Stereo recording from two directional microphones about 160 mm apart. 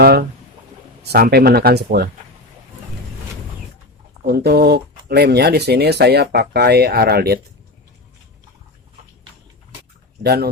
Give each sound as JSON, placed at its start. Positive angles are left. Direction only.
{"t": 0.0, "sound": "speech", "side_deg": -75}
{"t": 4.3, "sound": "speech", "side_deg": -85}
{"t": 10.2, "sound": "speech", "side_deg": -80}